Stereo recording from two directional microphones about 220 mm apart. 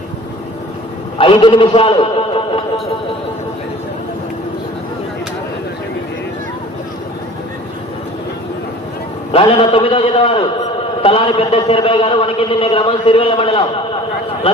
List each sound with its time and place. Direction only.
1.2 s a man's voice: 25° left (ahead or behind)
9.3 s a man's voice: 25° left (ahead or behind)